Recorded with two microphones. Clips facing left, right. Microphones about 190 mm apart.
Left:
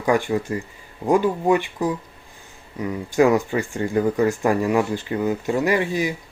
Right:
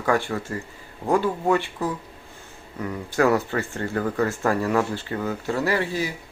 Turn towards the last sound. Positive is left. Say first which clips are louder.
# left 3 dB
turn(degrees=20)  # may be behind; listen again after turning